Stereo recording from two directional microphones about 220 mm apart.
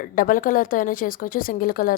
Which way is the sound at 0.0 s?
40° left (ahead or behind).